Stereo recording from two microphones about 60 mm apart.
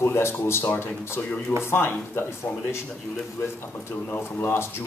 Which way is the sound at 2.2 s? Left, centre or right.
Left.